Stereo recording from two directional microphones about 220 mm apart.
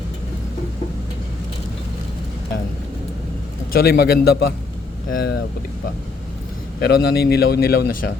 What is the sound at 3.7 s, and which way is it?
Speech, 45° left (ahead or behind).